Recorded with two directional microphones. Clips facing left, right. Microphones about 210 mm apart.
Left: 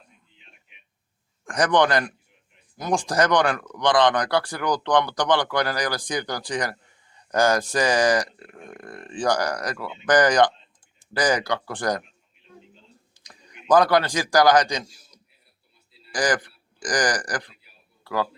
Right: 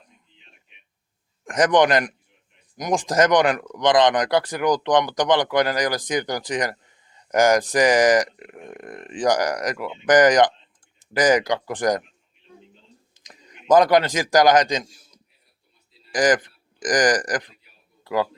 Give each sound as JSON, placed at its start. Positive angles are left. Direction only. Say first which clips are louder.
{"t": 1.5, "sound": "speech", "louder": "right 3 dB", "side_deg": -20}
{"t": 13.1, "sound": "speech", "louder": "even", "side_deg": -20}